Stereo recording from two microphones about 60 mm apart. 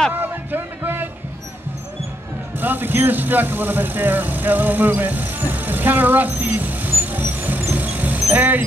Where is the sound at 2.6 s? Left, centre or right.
Right.